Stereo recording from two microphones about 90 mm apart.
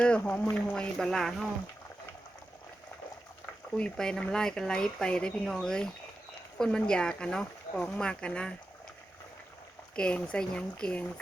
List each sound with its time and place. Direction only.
0.0 s speech: 15° left (ahead or behind)
3.8 s speech: 10° left (ahead or behind)
9.9 s speech: 10° left (ahead or behind)